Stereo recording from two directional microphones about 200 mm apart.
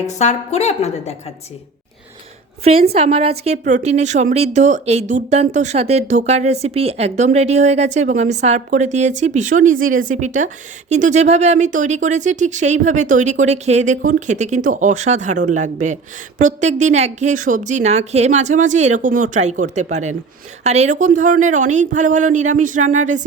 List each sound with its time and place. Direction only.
0.0 s a woman's voice: 35° left (ahead or behind)
2.9 s speech: 30° right (ahead or behind)